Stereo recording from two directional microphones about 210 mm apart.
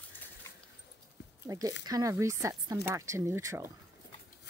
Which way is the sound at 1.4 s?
15° right (ahead or behind).